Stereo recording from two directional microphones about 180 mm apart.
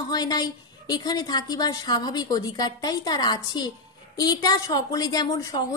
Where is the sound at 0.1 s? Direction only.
20° left (ahead or behind).